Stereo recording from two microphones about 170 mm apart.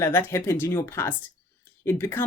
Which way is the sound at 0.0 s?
15° left (ahead or behind).